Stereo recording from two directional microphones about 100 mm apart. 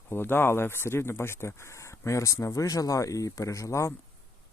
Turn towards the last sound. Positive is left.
turn(degrees=30)  # may be behind; listen again after turning